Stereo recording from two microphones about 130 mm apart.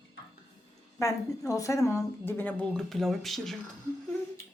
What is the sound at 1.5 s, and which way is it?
A woman's voice, 25° left (ahead or behind).